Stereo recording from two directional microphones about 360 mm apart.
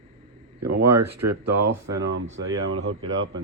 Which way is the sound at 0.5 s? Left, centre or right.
Right.